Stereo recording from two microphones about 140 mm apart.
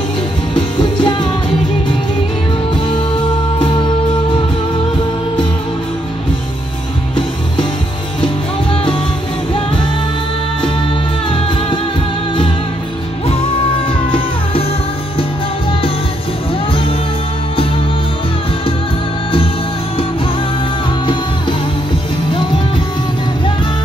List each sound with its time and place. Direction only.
0.6 s music: 35° left (ahead or behind)
3.5 s music: 35° left (ahead or behind)
13.8 s music: 35° left (ahead or behind)
22.3 s music: 35° left (ahead or behind)